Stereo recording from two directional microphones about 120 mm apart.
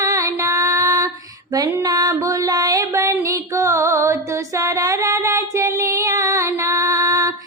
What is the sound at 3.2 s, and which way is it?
Music, 25° right (ahead or behind).